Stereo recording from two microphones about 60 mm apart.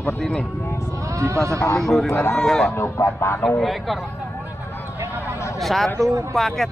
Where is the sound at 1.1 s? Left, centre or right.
Right.